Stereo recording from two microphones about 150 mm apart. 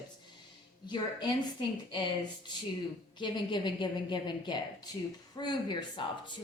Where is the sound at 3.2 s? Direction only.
30° left (ahead or behind).